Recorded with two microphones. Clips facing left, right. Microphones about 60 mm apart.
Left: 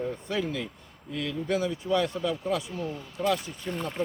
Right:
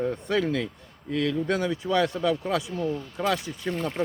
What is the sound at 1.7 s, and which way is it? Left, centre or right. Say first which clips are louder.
Speech: right 2 dB; right.